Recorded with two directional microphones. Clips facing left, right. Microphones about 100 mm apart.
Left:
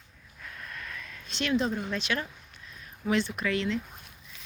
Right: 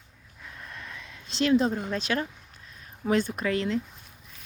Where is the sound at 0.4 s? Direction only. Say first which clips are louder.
Even; 20° right (ahead or behind).